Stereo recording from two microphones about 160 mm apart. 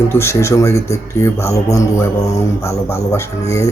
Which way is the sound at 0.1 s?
15° left (ahead or behind).